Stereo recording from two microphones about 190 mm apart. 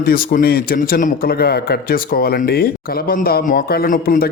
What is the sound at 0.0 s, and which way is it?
A man's voice, 50° left (ahead or behind).